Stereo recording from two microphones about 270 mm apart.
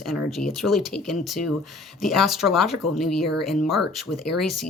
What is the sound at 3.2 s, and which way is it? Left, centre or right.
Speech, left.